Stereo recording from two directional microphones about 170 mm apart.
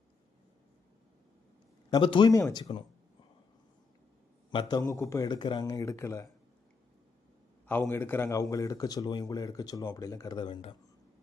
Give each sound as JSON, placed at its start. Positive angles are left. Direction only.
{"t": 1.9, "sound": "speech", "side_deg": 30}
{"t": 4.5, "sound": "speech", "side_deg": 25}
{"t": 7.7, "sound": "speech", "side_deg": 10}